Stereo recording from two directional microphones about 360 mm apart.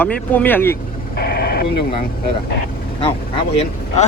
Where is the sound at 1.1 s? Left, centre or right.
Left.